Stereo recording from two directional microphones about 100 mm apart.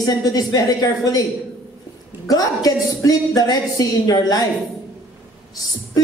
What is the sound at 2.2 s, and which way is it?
A woman's voice, 40° left (ahead or behind).